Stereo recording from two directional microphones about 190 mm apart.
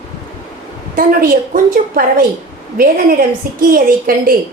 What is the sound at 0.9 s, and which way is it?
A woman's voice, 50° right (ahead or behind).